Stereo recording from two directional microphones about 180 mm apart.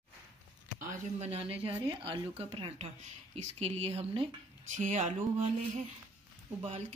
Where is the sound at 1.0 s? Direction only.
35° right (ahead or behind).